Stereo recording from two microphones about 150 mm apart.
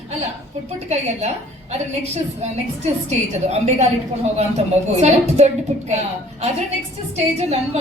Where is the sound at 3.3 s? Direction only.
50° right (ahead or behind).